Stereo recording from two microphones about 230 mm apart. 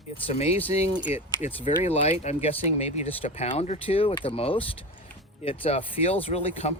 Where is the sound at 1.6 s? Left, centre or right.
Left.